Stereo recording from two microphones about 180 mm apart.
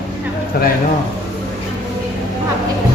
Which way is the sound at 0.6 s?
60° left (ahead or behind).